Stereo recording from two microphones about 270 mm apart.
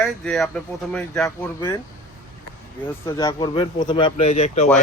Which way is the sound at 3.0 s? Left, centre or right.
Centre.